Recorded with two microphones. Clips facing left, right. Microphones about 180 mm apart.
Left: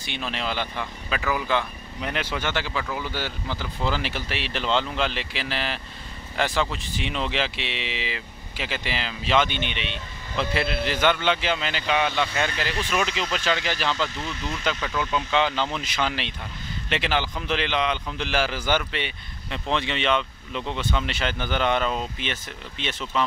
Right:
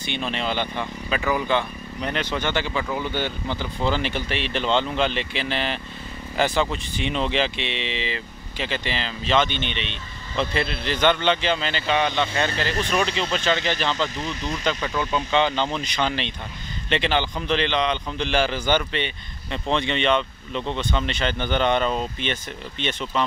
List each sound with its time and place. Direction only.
0.0 s a man's voice: centre (ahead or behind)
14.0 s speech: 15° right (ahead or behind)
14.7 s a man's voice: 5° left (ahead or behind)